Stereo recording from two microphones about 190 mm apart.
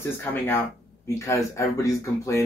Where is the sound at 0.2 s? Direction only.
10° left (ahead or behind).